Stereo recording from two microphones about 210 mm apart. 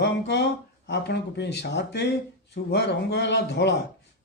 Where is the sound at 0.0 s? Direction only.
55° left (ahead or behind).